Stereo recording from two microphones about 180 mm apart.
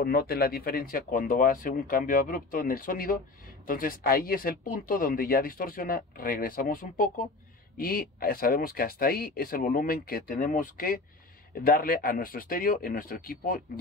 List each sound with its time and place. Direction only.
0.0 s speech: 60° left (ahead or behind)